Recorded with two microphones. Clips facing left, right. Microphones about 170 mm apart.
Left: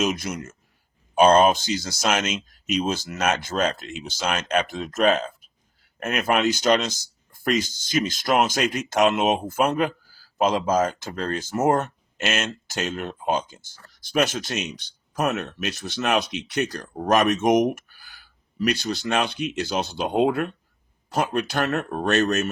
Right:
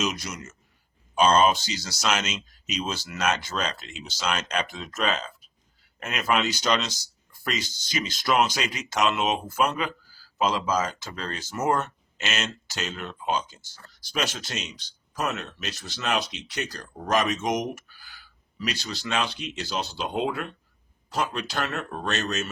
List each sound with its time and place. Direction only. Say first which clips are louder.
0.0 s speech: left 5 dB; 50° left (ahead or behind)